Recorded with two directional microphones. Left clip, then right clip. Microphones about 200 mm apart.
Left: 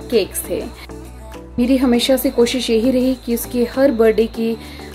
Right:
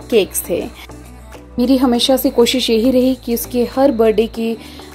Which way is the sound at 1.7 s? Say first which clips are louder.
Right 2 dB; 20° right (ahead or behind).